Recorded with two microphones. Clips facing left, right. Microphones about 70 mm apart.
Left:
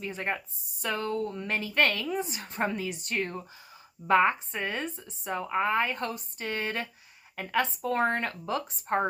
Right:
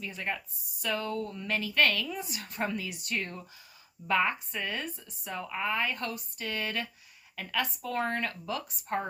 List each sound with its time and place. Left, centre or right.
0.0 s speech: left